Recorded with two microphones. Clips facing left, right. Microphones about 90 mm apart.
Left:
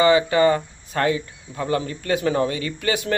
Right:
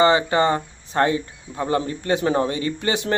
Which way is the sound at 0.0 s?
30° right (ahead or behind).